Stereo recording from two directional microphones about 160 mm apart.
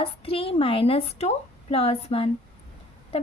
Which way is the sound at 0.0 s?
35° left (ahead or behind).